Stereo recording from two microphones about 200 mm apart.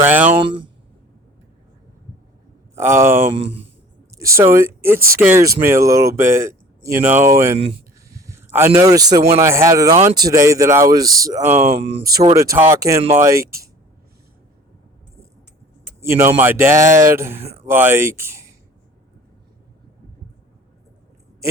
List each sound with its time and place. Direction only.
0.0 s speech: 10° right (ahead or behind)
0.3 s speech: 25° right (ahead or behind)
2.7 s speech: 10° right (ahead or behind)
3.4 s speech: 65° right (ahead or behind)
4.2 s speech: 15° right (ahead or behind)
7.5 s speech: 25° right (ahead or behind)
8.1 s a man's voice: 15° right (ahead or behind)
11.4 s speech: 35° right (ahead or behind)
12.4 s speech: 15° right (ahead or behind)
16.0 s speech: 10° right (ahead or behind)